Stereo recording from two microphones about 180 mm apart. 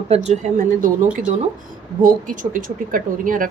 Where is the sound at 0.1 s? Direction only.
40° right (ahead or behind).